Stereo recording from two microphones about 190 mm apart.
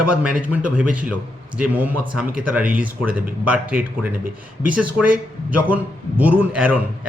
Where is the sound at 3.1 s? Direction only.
50° right (ahead or behind).